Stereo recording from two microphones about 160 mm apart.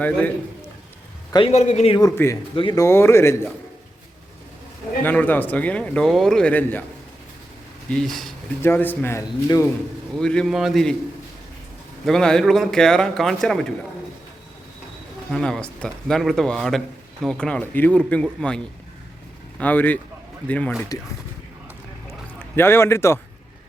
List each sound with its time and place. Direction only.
1.3 s a man's voice: 30° left (ahead or behind)
1.5 s a man's voice: 45° left (ahead or behind)
2.0 s speech: 20° left (ahead or behind)
2.6 s speech: 30° left (ahead or behind)
2.8 s speech: 15° left (ahead or behind)
5.0 s speech: 10° left (ahead or behind)
7.9 s speech: 5° left (ahead or behind)
8.6 s speech: 15° left (ahead or behind)
10.2 s speech: 5° left (ahead or behind)
12.0 s speech: 5° left (ahead or behind)
15.3 s speech: 5° left (ahead or behind)
22.5 s speech: 15° left (ahead or behind)